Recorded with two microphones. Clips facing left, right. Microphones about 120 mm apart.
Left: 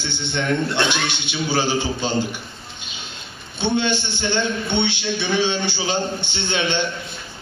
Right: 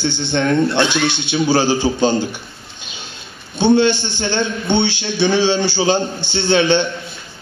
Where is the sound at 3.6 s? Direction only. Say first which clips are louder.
Right 8 dB; 35° right (ahead or behind).